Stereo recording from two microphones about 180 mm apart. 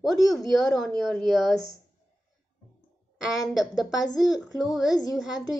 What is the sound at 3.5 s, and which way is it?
A woman's voice, centre (ahead or behind).